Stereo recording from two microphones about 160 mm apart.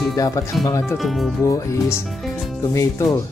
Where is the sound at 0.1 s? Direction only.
20° left (ahead or behind).